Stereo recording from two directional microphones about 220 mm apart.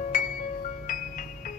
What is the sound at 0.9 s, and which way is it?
Music, 40° left (ahead or behind).